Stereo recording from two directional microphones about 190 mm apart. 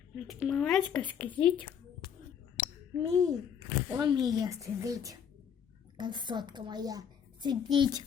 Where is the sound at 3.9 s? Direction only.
20° right (ahead or behind).